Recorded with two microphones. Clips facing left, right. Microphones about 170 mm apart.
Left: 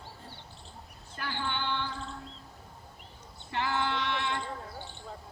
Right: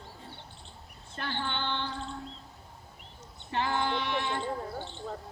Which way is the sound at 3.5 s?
20° right (ahead or behind).